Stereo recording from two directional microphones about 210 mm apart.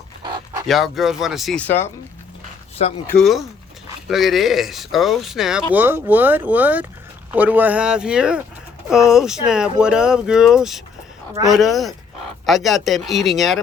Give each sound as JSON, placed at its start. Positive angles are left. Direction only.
{"t": 0.2, "sound": "dog", "side_deg": -20}
{"t": 0.7, "sound": "speech", "side_deg": 0}
{"t": 3.2, "sound": "speech", "side_deg": 0}